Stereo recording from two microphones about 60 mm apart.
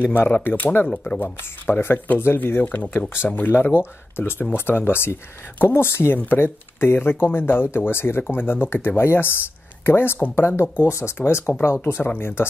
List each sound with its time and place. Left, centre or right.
0.4 s speech: left
1.2 s speech: left